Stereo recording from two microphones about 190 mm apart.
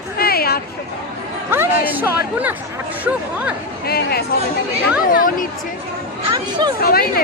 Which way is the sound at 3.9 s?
55° left (ahead or behind).